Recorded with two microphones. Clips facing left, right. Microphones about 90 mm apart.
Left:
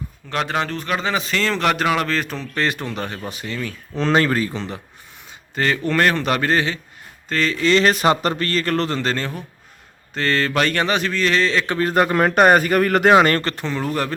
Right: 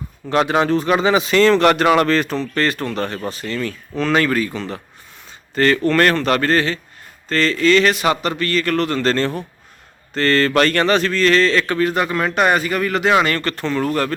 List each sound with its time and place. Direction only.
0.3 s speech: 10° right (ahead or behind)
2.6 s speech: 15° left (ahead or behind)
3.9 s speech: 30° left (ahead or behind)
5.5 s speech: 10° left (ahead or behind)
7.7 s speech: 35° left (ahead or behind)
9.0 s speech: 10° left (ahead or behind)
11.8 s speech: 40° left (ahead or behind)
13.4 s speech: 20° left (ahead or behind)